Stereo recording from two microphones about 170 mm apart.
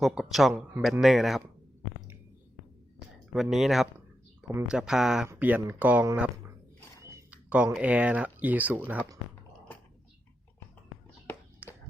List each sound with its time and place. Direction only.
0.0 s speech: centre (ahead or behind)
3.3 s speech: centre (ahead or behind)
11.6 s a sound: 10° right (ahead or behind)